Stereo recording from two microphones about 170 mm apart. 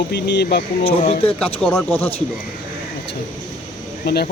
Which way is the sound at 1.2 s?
10° left (ahead or behind).